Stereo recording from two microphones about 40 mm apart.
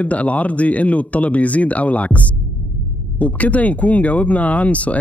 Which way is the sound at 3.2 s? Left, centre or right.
Left.